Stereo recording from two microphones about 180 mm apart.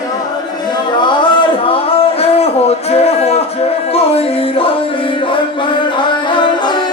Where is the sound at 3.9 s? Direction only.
35° left (ahead or behind).